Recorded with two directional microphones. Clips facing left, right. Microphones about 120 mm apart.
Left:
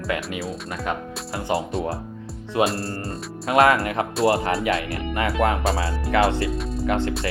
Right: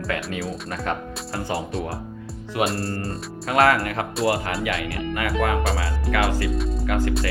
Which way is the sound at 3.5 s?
25° left (ahead or behind).